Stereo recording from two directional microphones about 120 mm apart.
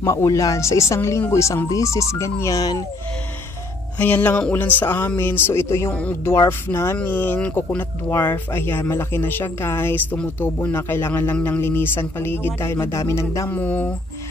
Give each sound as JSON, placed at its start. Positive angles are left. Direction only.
{"t": 0.0, "sound": "speech", "side_deg": 25}
{"t": 4.0, "sound": "speech", "side_deg": 15}